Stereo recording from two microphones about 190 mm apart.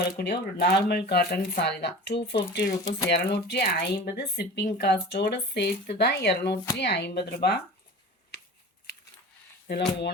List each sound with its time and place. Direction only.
0.2 s speech: 55° left (ahead or behind)
8.3 s scissors: 60° left (ahead or behind)
9.6 s speech: 60° left (ahead or behind)